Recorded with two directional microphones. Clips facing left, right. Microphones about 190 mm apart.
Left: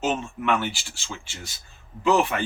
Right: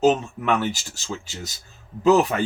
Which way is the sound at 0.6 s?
40° right (ahead or behind).